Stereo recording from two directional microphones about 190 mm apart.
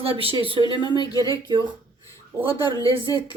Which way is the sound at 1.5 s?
25° right (ahead or behind).